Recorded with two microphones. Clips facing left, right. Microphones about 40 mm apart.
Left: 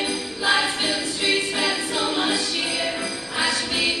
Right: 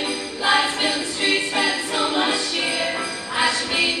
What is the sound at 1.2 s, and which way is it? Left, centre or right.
Music, centre.